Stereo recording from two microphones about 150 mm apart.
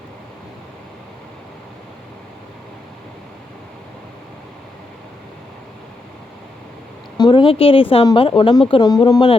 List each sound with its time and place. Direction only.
7.2 s speech: 30° left (ahead or behind)